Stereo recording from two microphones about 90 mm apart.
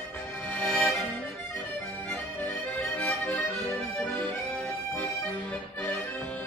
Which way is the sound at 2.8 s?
10° left (ahead or behind).